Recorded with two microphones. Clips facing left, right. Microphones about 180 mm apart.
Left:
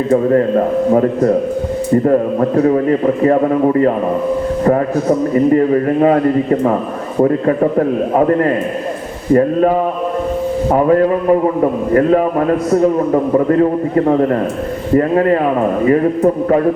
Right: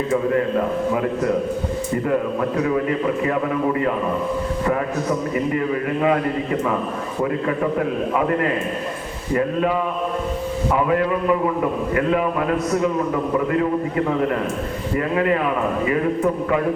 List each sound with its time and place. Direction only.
0.1 s a man's voice: 40° left (ahead or behind)